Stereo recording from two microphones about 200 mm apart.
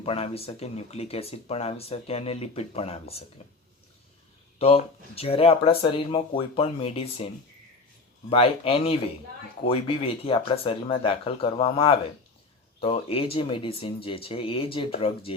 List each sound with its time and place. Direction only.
0.0 s speech: 30° left (ahead or behind)
4.5 s speech: 30° left (ahead or behind)
8.3 s speech: 25° left (ahead or behind)